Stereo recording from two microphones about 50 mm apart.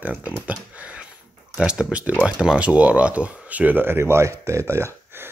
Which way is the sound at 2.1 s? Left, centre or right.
Right.